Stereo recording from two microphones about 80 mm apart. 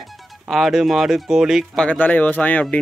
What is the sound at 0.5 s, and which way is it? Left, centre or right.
Speech, centre.